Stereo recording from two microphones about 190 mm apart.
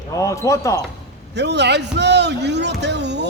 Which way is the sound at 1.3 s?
65° right (ahead or behind).